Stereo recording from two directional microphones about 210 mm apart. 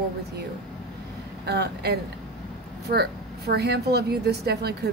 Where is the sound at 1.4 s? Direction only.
50° right (ahead or behind).